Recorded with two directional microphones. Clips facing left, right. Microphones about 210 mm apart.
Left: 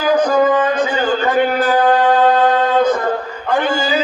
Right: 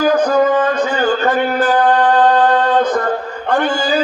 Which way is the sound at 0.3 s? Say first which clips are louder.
Even; 10° left (ahead or behind).